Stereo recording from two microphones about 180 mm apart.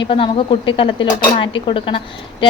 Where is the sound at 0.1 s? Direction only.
30° left (ahead or behind).